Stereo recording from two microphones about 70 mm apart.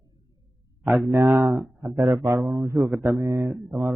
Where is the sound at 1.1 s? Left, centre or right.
Right.